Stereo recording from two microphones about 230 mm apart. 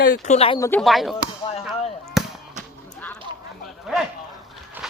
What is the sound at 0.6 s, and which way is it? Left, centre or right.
Speech, centre.